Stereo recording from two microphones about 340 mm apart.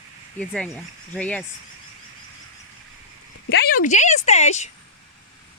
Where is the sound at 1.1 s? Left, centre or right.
Centre.